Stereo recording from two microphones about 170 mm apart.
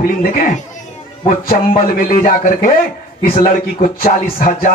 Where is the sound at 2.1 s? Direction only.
55° left (ahead or behind).